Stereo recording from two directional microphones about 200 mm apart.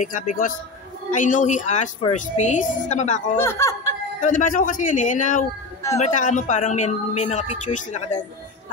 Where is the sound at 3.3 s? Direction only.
15° left (ahead or behind).